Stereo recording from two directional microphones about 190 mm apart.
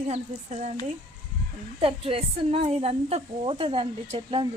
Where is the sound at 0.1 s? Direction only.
35° right (ahead or behind).